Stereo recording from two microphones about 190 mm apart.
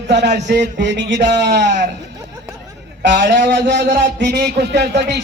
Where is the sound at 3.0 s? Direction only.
70° right (ahead or behind).